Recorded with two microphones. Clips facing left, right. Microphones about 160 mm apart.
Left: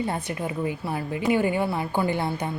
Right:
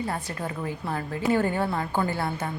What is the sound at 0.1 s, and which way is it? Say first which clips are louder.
A woman's voice: left 3 dB; 15° left (ahead or behind).